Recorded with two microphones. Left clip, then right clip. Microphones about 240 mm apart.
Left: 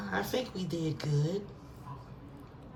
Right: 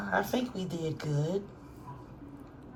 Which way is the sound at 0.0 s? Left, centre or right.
Centre.